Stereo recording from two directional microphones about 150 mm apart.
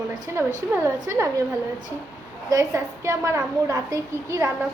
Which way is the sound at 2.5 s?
20° right (ahead or behind).